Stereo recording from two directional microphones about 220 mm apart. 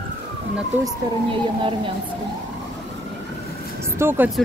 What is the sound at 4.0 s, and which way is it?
Speech, 10° right (ahead or behind).